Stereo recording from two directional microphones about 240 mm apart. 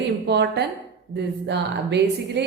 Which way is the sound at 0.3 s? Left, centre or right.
Right.